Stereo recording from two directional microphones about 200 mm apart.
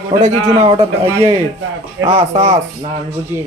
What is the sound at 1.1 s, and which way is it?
Speech, 10° right (ahead or behind).